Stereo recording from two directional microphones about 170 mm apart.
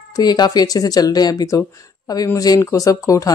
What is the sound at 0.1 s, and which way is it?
Speech, 25° left (ahead or behind).